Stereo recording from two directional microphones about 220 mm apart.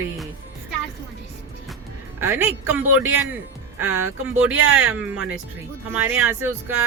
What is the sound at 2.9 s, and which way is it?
Speech, 70° right (ahead or behind).